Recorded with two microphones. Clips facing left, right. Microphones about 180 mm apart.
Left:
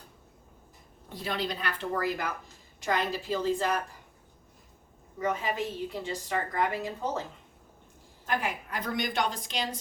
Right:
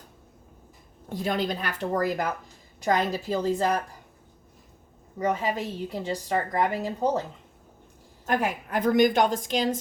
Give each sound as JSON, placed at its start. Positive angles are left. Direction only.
{"t": 1.1, "sound": "a woman's voice", "side_deg": -45}
{"t": 5.2, "sound": "a woman's voice", "side_deg": -40}
{"t": 8.3, "sound": "a woman's voice", "side_deg": -45}